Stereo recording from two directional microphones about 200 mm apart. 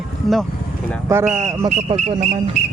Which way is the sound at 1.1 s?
15° right (ahead or behind).